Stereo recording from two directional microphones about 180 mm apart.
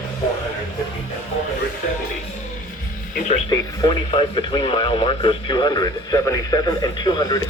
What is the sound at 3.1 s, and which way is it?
Speech, 40° left (ahead or behind).